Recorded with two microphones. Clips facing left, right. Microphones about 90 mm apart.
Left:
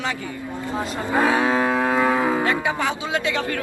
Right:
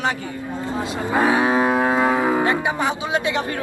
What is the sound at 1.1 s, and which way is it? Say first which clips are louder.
Livestock: right 1 dB; 20° right (ahead or behind).